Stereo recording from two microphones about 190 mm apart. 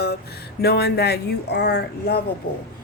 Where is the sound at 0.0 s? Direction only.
55° left (ahead or behind).